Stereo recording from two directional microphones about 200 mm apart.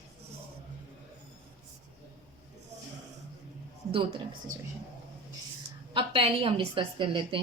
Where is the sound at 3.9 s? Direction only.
25° right (ahead or behind).